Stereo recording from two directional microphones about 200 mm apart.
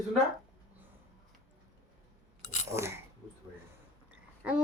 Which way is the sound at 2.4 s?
35° left (ahead or behind).